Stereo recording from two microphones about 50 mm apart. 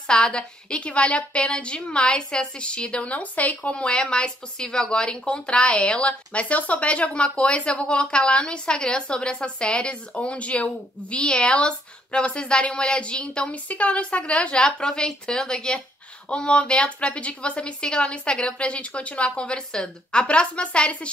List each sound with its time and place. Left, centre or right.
0.0 s a woman's voice: centre
16.3 s a woman's voice: left